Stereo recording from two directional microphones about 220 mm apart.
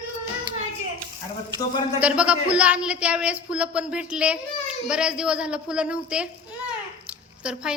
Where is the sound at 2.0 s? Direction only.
5° right (ahead or behind).